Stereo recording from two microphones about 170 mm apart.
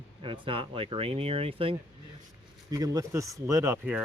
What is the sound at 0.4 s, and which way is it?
Speech, 30° right (ahead or behind).